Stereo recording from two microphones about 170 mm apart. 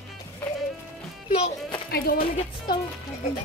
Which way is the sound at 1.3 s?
35° left (ahead or behind).